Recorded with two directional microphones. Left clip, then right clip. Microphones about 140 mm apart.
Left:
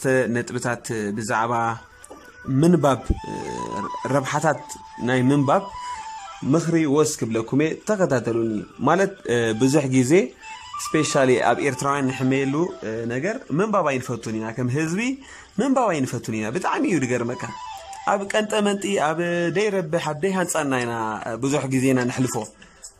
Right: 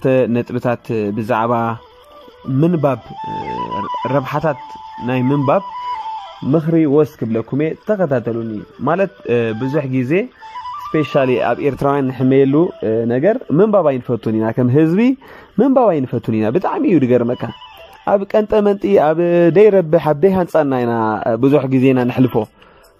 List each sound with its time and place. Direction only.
0.0 s a man's voice: 20° right (ahead or behind)
3.2 s speech: 50° right (ahead or behind)
4.0 s a man's voice: 10° right (ahead or behind)
9.6 s a man's voice: 5° left (ahead or behind); by 11.7 s 10° right (ahead or behind)
11.7 s a sound: 30° right (ahead or behind)
15.6 s speech: 30° right (ahead or behind)
18.0 s a sound: 30° right (ahead or behind)